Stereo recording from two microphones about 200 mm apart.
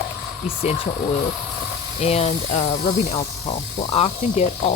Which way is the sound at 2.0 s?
30° left (ahead or behind).